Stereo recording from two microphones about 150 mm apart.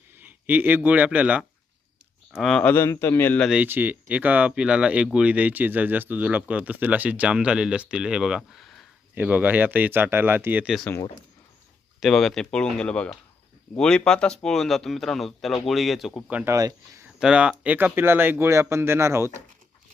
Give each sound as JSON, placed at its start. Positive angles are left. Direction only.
{"t": 0.2, "sound": "speech", "side_deg": -10}
{"t": 2.4, "sound": "speech", "side_deg": 5}
{"t": 3.4, "sound": "speech", "side_deg": -5}
{"t": 9.1, "sound": "speech", "side_deg": -10}
{"t": 11.9, "sound": "speech", "side_deg": 0}
{"t": 16.4, "sound": "speech", "side_deg": -20}
{"t": 17.2, "sound": "speech", "side_deg": -5}